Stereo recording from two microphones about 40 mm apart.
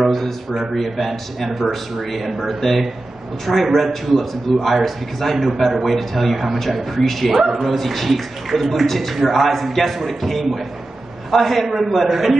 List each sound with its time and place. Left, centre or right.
0.0 s a man's voice: centre
7.4 s a man's voice: centre